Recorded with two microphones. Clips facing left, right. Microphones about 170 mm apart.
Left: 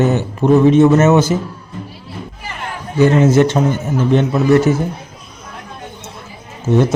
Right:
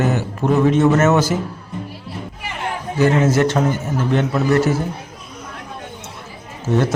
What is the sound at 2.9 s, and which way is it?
A man's voice, 20° left (ahead or behind).